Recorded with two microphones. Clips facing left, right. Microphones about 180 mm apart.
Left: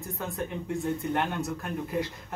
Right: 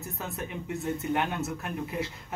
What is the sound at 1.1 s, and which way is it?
Speech, 5° right (ahead or behind).